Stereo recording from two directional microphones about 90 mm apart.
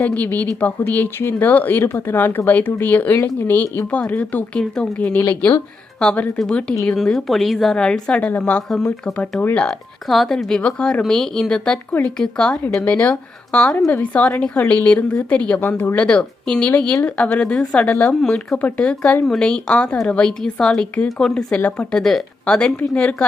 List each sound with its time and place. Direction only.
0.0 s a woman's voice: 20° left (ahead or behind)
11.9 s a woman's voice: 20° left (ahead or behind)